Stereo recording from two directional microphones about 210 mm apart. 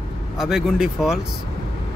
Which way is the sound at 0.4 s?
Centre (ahead or behind).